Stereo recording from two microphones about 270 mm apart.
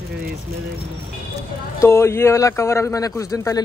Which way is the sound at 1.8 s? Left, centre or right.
Centre.